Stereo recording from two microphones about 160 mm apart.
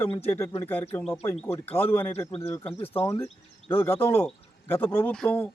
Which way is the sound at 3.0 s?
15° left (ahead or behind).